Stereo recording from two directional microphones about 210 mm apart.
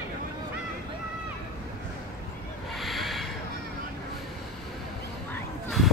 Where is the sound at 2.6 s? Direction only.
Centre (ahead or behind).